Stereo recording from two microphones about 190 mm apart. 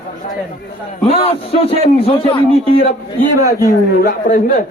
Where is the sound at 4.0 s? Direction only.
50° left (ahead or behind).